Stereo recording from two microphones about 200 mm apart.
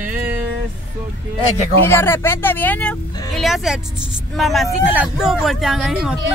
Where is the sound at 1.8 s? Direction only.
10° left (ahead or behind).